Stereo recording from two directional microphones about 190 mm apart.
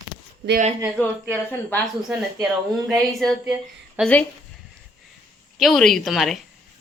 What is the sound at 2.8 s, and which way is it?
A woman's voice, centre (ahead or behind).